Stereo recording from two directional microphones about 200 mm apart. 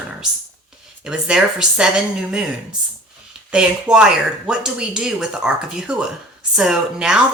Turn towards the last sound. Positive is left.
turn(degrees=-5)  # may be behind; listen again after turning